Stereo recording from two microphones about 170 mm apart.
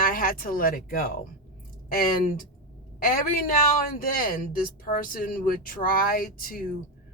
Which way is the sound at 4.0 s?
55° left (ahead or behind).